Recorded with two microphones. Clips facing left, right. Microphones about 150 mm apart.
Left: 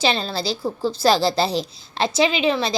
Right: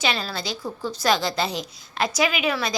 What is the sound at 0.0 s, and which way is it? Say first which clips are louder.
A woman's voice: left 5 dB; 30° left (ahead or behind).